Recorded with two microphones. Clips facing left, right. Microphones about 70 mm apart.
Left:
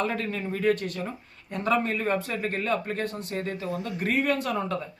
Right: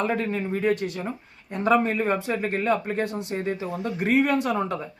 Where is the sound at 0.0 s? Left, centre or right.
Centre.